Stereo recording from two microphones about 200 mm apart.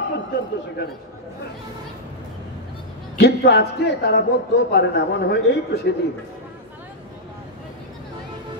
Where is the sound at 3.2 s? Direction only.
55° left (ahead or behind).